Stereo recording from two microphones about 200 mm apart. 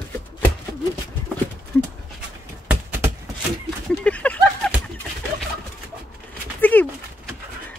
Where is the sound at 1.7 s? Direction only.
10° left (ahead or behind).